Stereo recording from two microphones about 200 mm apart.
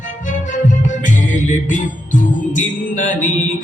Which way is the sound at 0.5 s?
40° left (ahead or behind).